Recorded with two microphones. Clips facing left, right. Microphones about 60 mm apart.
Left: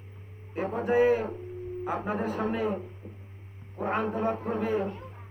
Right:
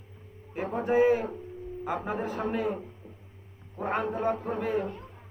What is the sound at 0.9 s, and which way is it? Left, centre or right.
Speech, left.